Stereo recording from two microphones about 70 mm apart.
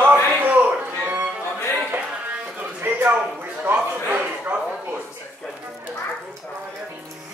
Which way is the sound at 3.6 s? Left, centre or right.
Right.